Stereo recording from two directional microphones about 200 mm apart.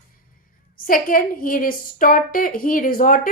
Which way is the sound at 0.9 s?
45° left (ahead or behind).